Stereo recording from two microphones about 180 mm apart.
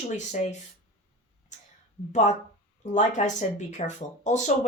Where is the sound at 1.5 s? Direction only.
40° left (ahead or behind).